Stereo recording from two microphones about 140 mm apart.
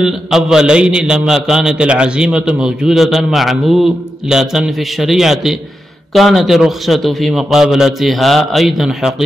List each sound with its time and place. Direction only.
0.0 s a man's voice: 5° right (ahead or behind)